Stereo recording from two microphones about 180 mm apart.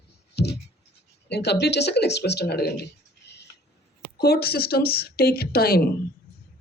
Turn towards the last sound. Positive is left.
turn(degrees=55)  # may be behind; listen again after turning